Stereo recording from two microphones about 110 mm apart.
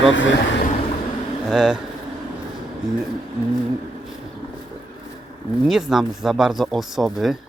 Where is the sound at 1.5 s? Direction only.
5° right (ahead or behind).